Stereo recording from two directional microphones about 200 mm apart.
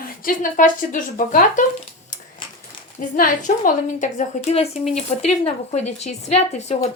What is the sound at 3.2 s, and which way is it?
A woman's voice, 45° left (ahead or behind).